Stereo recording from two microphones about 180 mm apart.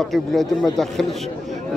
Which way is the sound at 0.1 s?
Centre (ahead or behind).